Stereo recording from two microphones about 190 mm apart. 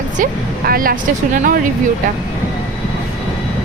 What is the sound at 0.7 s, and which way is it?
Speech, 50° right (ahead or behind).